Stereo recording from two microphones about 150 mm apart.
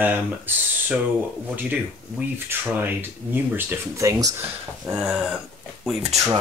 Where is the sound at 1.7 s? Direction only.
10° right (ahead or behind).